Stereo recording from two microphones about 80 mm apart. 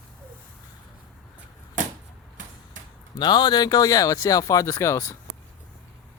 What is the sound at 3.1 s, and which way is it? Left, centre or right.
Speech, left.